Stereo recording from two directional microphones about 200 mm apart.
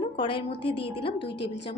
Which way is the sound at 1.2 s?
60° left (ahead or behind).